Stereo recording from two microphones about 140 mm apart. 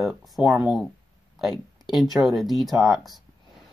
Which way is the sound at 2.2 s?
Centre (ahead or behind).